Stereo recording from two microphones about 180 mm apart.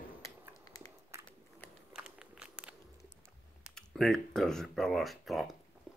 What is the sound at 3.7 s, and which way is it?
Speech, 5° left (ahead or behind).